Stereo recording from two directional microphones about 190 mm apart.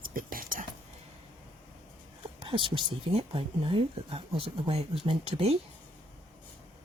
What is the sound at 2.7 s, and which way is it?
Speech, 25° right (ahead or behind).